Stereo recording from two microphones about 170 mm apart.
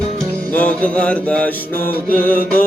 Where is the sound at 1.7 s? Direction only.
55° left (ahead or behind).